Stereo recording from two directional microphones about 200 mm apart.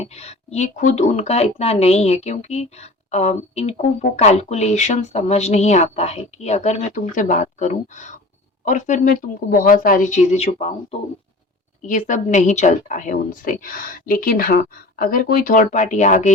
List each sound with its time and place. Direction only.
0.0 s speech: 30° left (ahead or behind)
11.9 s speech: 40° left (ahead or behind)